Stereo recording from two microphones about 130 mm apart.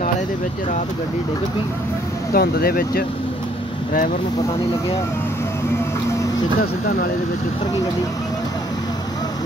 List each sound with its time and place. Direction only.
2.3 s speech: 90° left